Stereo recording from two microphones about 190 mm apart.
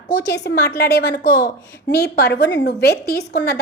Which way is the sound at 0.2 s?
65° left (ahead or behind).